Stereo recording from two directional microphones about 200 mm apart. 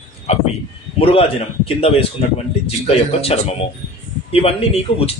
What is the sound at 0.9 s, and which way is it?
Speech, 30° left (ahead or behind).